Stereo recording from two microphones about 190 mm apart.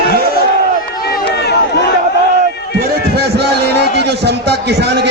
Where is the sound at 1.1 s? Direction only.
55° left (ahead or behind).